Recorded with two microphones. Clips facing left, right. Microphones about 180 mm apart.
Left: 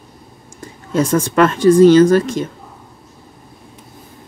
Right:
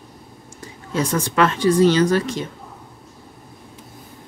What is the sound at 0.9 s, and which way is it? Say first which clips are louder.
Speech: left 6 dB; 45° left (ahead or behind).